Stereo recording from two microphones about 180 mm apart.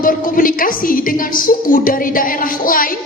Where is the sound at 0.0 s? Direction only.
50° left (ahead or behind).